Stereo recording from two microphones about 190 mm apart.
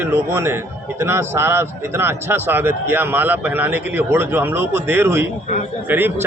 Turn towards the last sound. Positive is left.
turn(degrees=-10)  # may be behind; listen again after turning